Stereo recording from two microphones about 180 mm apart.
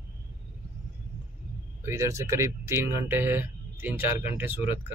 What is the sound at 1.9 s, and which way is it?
Speech, 15° right (ahead or behind).